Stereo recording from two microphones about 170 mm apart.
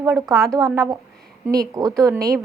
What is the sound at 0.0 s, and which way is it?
Speech, 20° right (ahead or behind).